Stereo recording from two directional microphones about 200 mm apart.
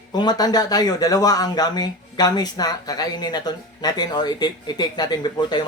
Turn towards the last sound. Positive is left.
turn(degrees=20)  # may be behind; listen again after turning